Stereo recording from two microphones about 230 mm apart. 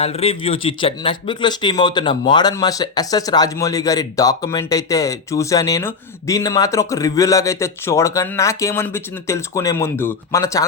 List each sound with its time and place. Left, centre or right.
0.0 s speech: left